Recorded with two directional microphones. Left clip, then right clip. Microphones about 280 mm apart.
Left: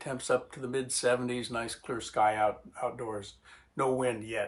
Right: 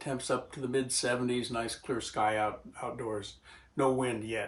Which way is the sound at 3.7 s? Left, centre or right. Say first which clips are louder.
Even; centre.